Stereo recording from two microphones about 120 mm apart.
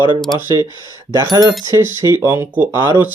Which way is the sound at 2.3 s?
15° right (ahead or behind).